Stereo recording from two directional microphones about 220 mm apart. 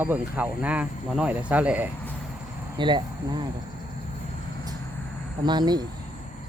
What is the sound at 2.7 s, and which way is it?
Speech, 20° right (ahead or behind).